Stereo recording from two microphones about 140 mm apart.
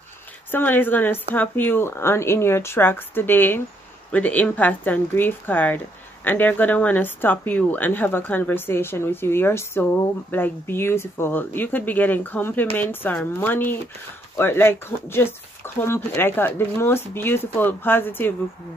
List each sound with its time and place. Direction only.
0.5 s speech: 15° left (ahead or behind)